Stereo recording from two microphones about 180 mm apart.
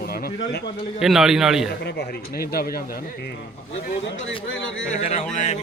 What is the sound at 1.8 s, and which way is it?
A man's voice, 65° left (ahead or behind).